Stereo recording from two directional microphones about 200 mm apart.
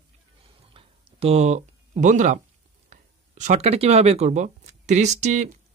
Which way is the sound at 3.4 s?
35° right (ahead or behind).